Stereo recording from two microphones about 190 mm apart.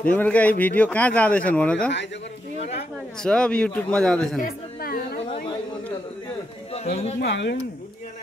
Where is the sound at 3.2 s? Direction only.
5° left (ahead or behind).